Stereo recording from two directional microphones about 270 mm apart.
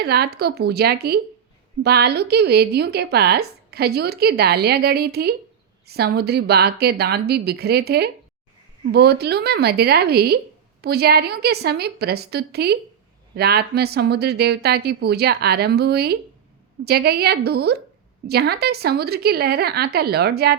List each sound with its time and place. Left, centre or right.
0.0 s speech: right